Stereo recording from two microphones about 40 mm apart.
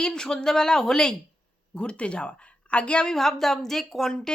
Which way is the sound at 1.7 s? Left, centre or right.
Left.